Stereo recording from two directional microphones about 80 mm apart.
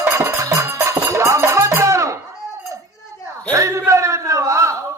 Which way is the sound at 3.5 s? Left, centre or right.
Right.